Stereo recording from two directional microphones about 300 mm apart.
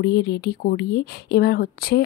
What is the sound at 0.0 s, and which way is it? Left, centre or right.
Speech, left.